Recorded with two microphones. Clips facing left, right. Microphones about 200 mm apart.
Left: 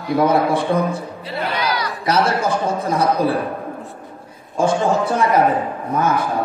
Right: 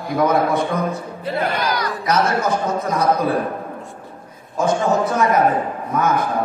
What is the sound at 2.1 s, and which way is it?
A man's voice, 30° left (ahead or behind).